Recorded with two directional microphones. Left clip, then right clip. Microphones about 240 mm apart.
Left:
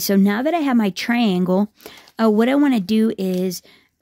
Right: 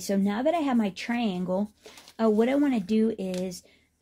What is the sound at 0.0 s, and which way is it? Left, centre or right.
Speech, left.